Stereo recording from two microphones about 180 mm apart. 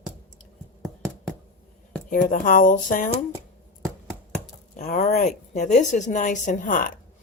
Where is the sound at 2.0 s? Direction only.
45° left (ahead or behind).